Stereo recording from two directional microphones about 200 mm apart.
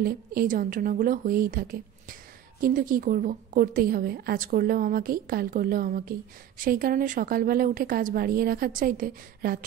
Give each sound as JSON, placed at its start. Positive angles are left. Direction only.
{"t": 0.0, "sound": "a woman's voice", "side_deg": -45}